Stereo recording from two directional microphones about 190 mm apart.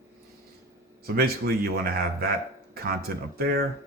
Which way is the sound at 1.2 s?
50° right (ahead or behind).